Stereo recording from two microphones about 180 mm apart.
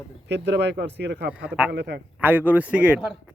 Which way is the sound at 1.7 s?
70° right (ahead or behind).